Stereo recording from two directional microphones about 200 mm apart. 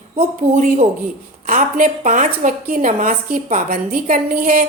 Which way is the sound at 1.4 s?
40° right (ahead or behind).